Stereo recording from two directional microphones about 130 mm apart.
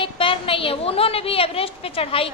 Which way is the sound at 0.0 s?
45° left (ahead or behind).